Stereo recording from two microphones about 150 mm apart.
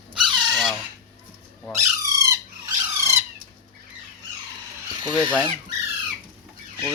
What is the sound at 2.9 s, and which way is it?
Dog, 20° right (ahead or behind).